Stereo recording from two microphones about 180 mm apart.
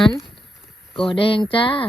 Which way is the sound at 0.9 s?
30° left (ahead or behind).